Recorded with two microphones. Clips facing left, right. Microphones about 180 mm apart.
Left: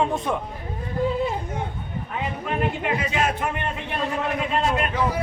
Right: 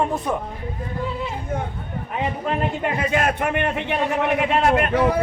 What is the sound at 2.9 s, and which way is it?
A man's voice, 55° right (ahead or behind).